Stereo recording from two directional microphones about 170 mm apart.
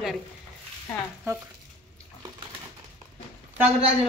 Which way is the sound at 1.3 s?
15° right (ahead or behind).